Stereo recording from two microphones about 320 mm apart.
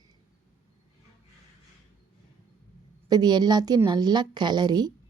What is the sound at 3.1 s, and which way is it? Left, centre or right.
A woman's voice, centre.